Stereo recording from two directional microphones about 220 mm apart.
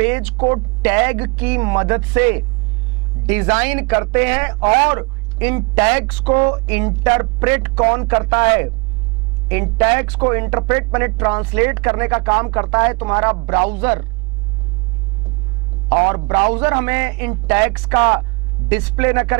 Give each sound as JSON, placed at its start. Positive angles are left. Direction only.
{"t": 0.0, "sound": "speech", "side_deg": -10}
{"t": 16.5, "sound": "speech", "side_deg": -10}